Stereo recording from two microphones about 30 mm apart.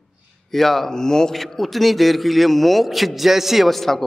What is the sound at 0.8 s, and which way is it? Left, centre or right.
Speech, centre.